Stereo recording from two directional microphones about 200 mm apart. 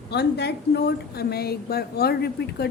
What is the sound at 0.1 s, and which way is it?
A woman's voice, 55° left (ahead or behind).